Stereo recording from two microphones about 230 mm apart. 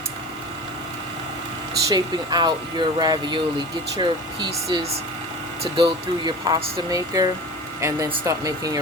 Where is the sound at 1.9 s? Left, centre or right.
Centre.